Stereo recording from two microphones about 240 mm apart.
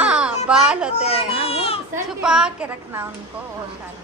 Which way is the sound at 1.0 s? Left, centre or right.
Left.